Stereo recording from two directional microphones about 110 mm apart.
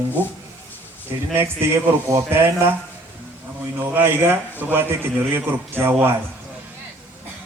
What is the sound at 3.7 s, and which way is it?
A man's voice, 20° right (ahead or behind).